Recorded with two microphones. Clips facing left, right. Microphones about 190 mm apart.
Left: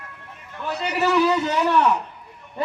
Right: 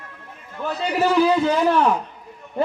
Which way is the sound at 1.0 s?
40° right (ahead or behind).